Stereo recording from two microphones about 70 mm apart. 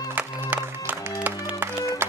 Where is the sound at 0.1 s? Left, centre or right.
Right.